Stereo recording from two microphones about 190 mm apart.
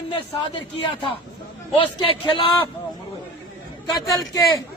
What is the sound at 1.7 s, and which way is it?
Speech, 25° left (ahead or behind).